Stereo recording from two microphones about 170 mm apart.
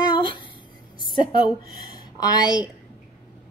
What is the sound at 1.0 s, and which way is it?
A woman's voice, 30° left (ahead or behind).